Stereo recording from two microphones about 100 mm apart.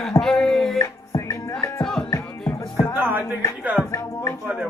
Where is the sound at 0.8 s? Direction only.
30° left (ahead or behind).